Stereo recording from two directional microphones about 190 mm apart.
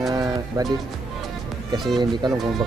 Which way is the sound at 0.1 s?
20° right (ahead or behind).